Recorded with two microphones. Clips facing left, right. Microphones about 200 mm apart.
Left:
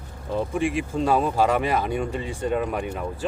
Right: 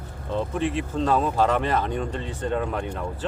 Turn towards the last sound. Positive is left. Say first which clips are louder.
# left 1 dB
turn(degrees=10)  # may be behind; listen again after turning